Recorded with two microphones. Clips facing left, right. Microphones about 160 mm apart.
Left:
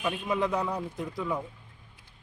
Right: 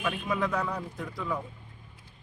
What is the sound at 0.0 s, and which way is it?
A man's voice, 20° left (ahead or behind).